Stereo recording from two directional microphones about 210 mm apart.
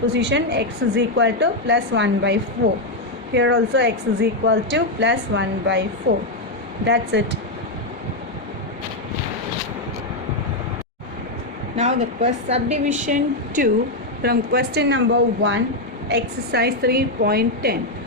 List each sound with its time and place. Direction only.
0.1 s speech: 55° right (ahead or behind)
11.8 s a woman's voice: 35° right (ahead or behind)
14.2 s a woman's voice: 50° right (ahead or behind)